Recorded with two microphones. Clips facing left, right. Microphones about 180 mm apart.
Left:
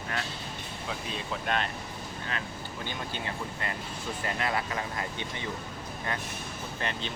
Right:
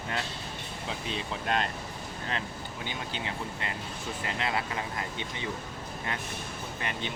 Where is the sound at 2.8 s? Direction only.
15° right (ahead or behind).